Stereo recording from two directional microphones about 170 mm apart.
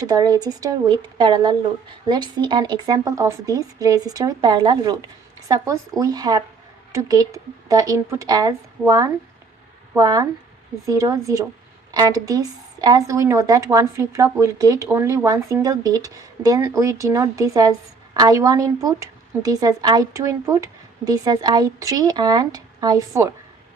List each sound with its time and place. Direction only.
0.0 s speech: 20° right (ahead or behind)